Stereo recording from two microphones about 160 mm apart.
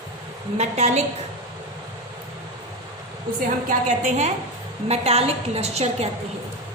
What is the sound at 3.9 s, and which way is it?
A woman's voice, 50° right (ahead or behind).